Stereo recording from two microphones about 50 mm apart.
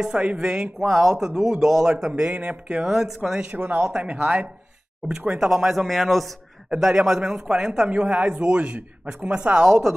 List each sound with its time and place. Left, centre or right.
0.0 s speech: right
2.9 s speech: centre
3.5 s a man's voice: right; by 6.9 s centre
6.9 s speech: centre
7.9 s speech: right